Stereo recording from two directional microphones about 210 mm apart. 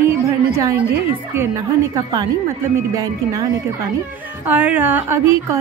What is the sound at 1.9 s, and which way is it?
A woman's voice, 15° right (ahead or behind).